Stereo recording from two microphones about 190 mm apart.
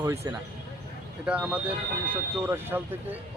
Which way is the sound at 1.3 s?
5° right (ahead or behind).